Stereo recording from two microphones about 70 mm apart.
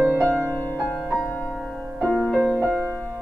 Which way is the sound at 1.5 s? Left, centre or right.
Centre.